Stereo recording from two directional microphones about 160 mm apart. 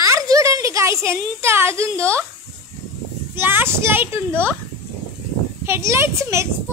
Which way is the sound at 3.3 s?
15° right (ahead or behind).